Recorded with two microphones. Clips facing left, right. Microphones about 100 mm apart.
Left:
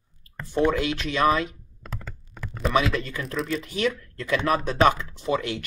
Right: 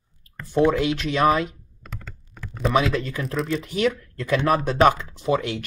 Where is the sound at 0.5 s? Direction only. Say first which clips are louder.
Right 3 dB; 15° right (ahead or behind).